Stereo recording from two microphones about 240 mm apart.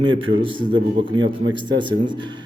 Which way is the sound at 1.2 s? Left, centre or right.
Right.